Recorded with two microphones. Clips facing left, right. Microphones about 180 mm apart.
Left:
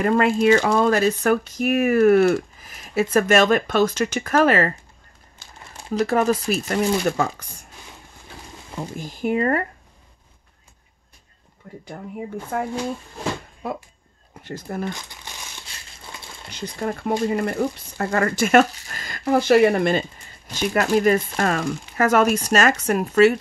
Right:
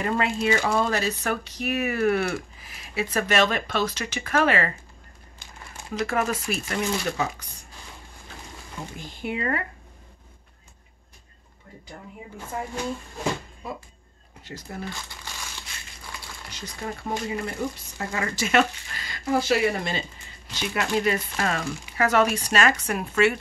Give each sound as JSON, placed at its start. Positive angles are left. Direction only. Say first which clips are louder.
{"t": 0.0, "sound": "speech", "louder": "left 7 dB", "side_deg": 50}
{"t": 5.4, "sound": "crumpling", "louder": "left 1 dB", "side_deg": -15}
{"t": 5.9, "sound": "speech", "louder": "left 6 dB", "side_deg": 35}
{"t": 8.9, "sound": "speech", "louder": "left 9 dB", "side_deg": 45}
{"t": 12.5, "sound": "speech", "louder": "left 4 dB", "side_deg": 65}
{"t": 14.4, "sound": "speech", "louder": "left 7 dB", "side_deg": 55}
{"t": 14.9, "sound": "speech", "louder": "left 5 dB", "side_deg": 20}
{"t": 16.5, "sound": "speech", "louder": "left 8 dB", "side_deg": 55}